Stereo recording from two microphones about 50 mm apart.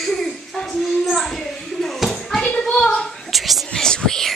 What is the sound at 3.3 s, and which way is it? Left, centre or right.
Whispering, centre.